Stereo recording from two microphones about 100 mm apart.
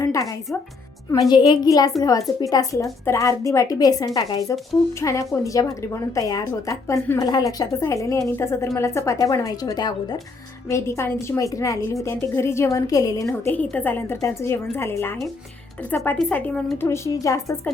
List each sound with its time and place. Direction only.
0.0 s music: 35° left (ahead or behind)
1.3 s a woman's voice: 50° left (ahead or behind)
10.7 s a woman's voice: 30° left (ahead or behind)
13.5 s a woman's voice: 15° left (ahead or behind)
16.3 s a woman's voice: 15° left (ahead or behind)